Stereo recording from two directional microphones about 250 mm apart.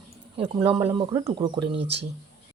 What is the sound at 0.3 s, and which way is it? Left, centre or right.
Speech, right.